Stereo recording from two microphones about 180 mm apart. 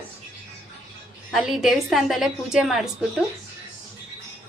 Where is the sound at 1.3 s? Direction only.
Centre (ahead or behind).